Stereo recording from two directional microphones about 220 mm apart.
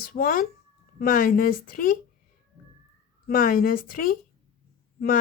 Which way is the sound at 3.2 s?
40° left (ahead or behind).